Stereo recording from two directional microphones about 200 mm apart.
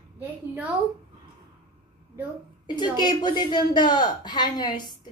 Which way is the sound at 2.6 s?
20° left (ahead or behind).